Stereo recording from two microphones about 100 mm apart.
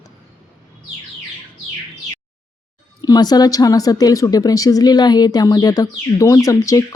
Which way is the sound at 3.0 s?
40° left (ahead or behind).